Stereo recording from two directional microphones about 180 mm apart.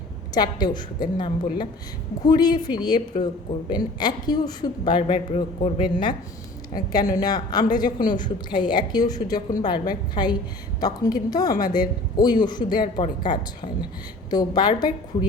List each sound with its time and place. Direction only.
0.3 s a woman's voice: 25° left (ahead or behind)